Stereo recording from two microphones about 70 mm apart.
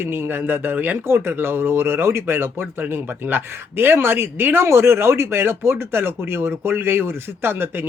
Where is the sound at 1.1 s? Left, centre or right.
Right.